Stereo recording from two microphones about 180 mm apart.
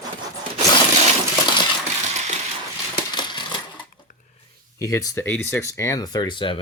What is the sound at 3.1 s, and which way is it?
Coin, 25° left (ahead or behind).